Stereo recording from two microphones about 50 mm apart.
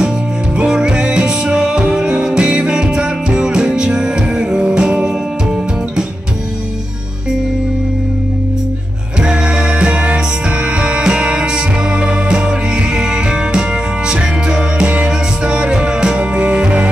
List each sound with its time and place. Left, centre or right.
0.7 s music: centre
9.2 s music: centre